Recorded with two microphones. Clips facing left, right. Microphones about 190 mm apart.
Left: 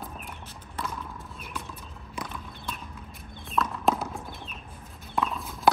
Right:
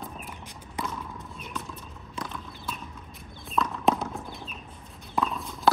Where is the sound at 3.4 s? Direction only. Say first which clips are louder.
Right 1 dB; centre (ahead or behind).